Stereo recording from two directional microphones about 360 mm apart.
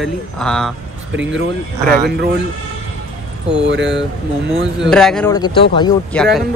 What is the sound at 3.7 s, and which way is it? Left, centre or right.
Speech, right.